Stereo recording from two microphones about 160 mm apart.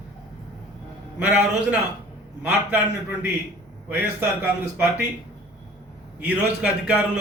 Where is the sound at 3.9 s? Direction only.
10° right (ahead or behind).